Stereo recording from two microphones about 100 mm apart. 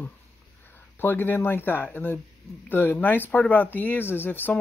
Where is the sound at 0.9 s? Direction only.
20° left (ahead or behind).